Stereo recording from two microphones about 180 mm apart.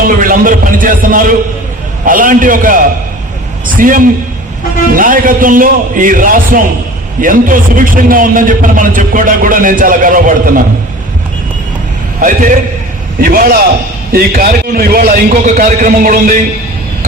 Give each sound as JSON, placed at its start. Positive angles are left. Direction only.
{"t": 0.2, "sound": "a man's voice", "side_deg": -50}
{"t": 12.2, "sound": "a man's voice", "side_deg": -50}